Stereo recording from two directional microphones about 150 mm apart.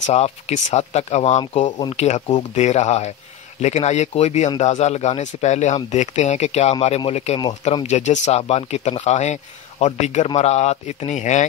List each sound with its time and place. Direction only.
0.0 s speech: 50° left (ahead or behind)